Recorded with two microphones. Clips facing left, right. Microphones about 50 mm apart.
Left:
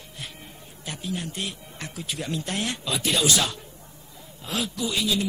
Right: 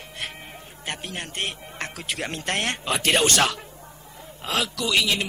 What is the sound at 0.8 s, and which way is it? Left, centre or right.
A man's voice, right.